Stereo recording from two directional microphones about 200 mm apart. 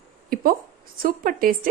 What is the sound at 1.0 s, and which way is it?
Speech, 45° right (ahead or behind).